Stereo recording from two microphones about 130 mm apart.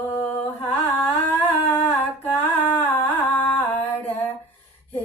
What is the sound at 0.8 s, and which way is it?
Humming, 15° left (ahead or behind).